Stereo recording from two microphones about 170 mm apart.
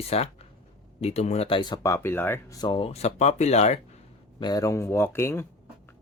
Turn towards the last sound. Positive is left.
turn(degrees=15)  # may be behind; listen again after turning